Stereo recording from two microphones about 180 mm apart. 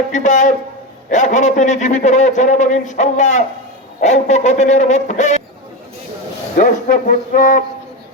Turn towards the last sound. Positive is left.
turn(degrees=50)  # may be behind; listen again after turning